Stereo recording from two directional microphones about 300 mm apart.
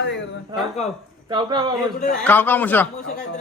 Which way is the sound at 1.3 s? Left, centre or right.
Centre.